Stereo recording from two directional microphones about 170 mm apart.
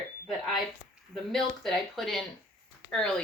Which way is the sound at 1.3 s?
5° left (ahead or behind).